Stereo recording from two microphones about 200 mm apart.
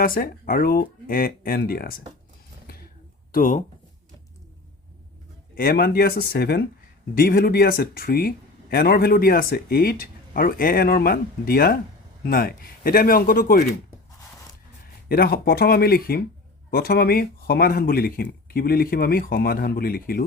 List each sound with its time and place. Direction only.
0.0 s speech: 45° left (ahead or behind)
2.6 s a sound: 50° left (ahead or behind)
3.3 s speech: 40° left (ahead or behind)
5.5 s speech: 50° left (ahead or behind)
15.1 s speech: 50° left (ahead or behind)